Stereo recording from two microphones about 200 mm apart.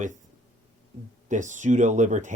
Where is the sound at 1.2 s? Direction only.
40° right (ahead or behind).